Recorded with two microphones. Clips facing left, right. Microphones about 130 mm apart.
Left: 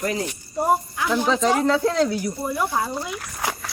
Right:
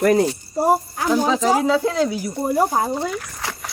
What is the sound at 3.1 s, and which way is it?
Speech, 10° left (ahead or behind).